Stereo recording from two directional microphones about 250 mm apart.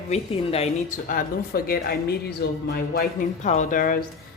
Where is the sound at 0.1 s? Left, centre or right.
Left.